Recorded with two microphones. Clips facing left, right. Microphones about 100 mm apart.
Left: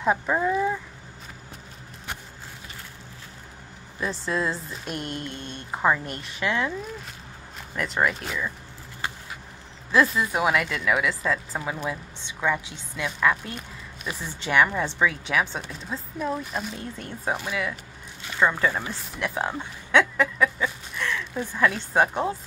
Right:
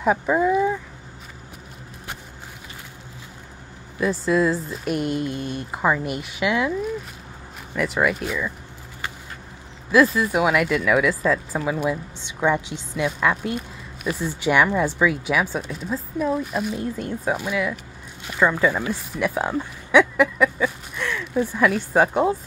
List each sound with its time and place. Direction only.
0.0 s speech: 5° right (ahead or behind)
4.0 s speech: 5° right (ahead or behind)
7.7 s speech: 5° right (ahead or behind)
9.8 s speech: 5° right (ahead or behind)
12.2 s a woman's voice: 20° right (ahead or behind)
14.1 s speech: 5° right (ahead or behind)